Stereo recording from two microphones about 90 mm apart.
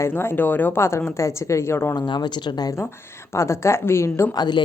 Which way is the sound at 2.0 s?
55° left (ahead or behind).